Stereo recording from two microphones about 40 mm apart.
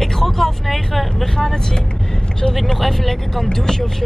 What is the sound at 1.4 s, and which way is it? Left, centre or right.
Speech, centre.